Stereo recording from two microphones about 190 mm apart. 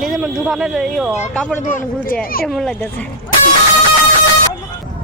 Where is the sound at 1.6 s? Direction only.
45° left (ahead or behind).